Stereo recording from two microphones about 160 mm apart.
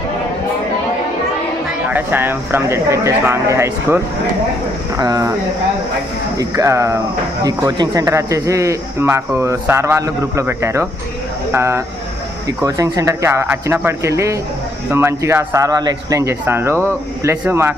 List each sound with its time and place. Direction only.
1.9 s speech: 10° right (ahead or behind)
6.3 s speech: 20° right (ahead or behind)